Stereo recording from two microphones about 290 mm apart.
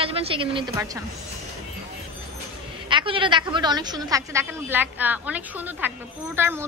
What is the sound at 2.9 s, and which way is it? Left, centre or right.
A woman's voice, centre.